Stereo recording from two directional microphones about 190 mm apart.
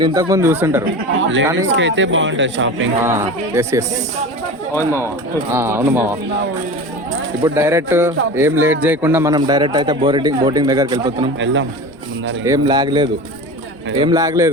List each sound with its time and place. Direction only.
0.0 s a man's voice: 20° right (ahead or behind)
1.1 s speech: 80° right
3.0 s a man's voice: 15° right (ahead or behind)
7.4 s a man's voice: 15° right (ahead or behind)
11.3 s speech: 80° right
12.5 s a man's voice: 20° right (ahead or behind)